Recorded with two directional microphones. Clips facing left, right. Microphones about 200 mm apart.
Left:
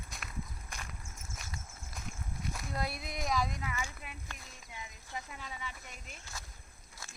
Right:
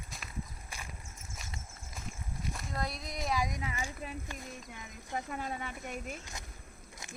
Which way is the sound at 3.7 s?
35° right (ahead or behind).